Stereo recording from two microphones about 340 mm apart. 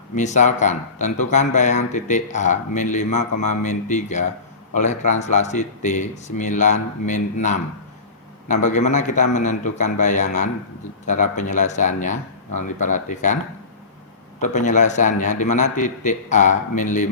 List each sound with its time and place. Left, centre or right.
0.2 s speech: left
8.6 s speech: left
14.4 s speech: left